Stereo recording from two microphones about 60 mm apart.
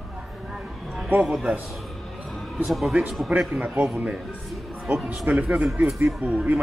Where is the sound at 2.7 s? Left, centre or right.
Centre.